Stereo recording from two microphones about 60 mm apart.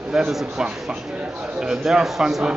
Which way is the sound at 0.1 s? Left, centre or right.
Centre.